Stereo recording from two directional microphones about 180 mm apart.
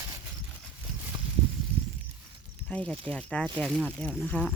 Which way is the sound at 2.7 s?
5° left (ahead or behind).